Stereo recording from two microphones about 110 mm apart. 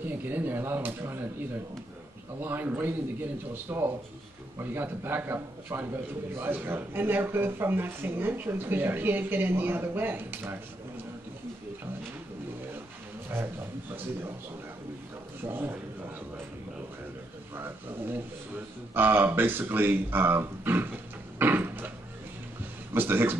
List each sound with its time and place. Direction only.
0.0 s a man's voice: 20° right (ahead or behind)
2.4 s a man's voice: 20° right (ahead or behind)
13.3 s a man's voice: 20° right (ahead or behind)
15.4 s a man's voice: 20° right (ahead or behind)
17.6 s a man's voice: 20° right (ahead or behind)
21.4 s a sound: 20° right (ahead or behind)
22.9 s a man's voice: 20° right (ahead or behind)